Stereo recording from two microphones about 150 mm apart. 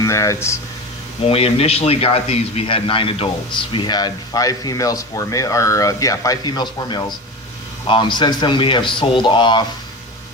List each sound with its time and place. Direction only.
0.0 s speech: 20° left (ahead or behind)
1.2 s speech: 40° left (ahead or behind)